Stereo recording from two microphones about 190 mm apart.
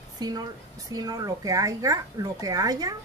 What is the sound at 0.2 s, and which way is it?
Speech, 20° right (ahead or behind).